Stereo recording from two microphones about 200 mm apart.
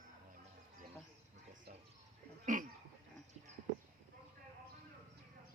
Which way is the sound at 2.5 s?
40° right (ahead or behind).